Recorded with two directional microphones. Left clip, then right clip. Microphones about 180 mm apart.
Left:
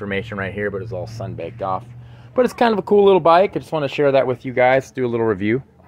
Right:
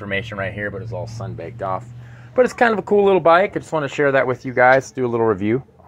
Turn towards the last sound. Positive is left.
turn(degrees=10)  # may be behind; listen again after turning